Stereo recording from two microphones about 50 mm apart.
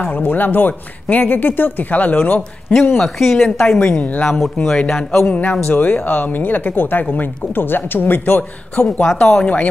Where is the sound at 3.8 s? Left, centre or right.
Left.